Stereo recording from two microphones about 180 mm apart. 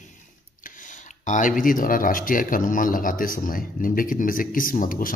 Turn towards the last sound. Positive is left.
turn(degrees=50)  # may be behind; listen again after turning